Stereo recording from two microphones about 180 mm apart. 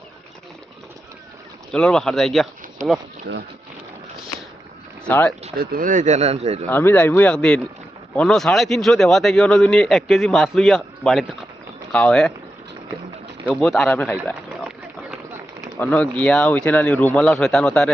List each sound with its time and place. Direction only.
1.7 s a man's voice: 5° left (ahead or behind)
5.0 s speech: 5° left (ahead or behind)
5.5 s speech: 50° right (ahead or behind)
6.7 s a man's voice: 10° left (ahead or behind)
13.5 s a man's voice: centre (ahead or behind)
15.8 s speech: 5° left (ahead or behind)